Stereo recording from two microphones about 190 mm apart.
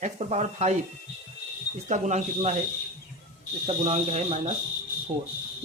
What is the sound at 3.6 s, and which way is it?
Speech, 35° right (ahead or behind).